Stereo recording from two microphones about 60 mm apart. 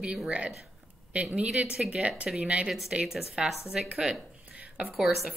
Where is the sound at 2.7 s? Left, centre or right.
Centre.